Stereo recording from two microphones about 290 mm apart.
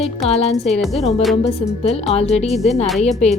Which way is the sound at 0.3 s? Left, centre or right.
Left.